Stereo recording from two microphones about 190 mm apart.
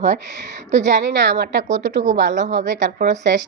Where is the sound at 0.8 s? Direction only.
65° right (ahead or behind).